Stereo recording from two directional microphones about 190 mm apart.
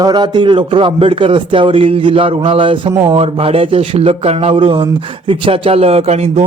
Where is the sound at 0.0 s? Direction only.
20° right (ahead or behind).